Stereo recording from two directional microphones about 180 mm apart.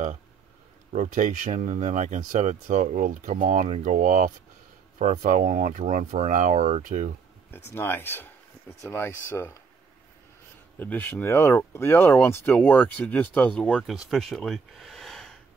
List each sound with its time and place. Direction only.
0.9 s speech: 45° right (ahead or behind)
7.5 s speech: 15° left (ahead or behind)
10.8 s speech: 10° left (ahead or behind)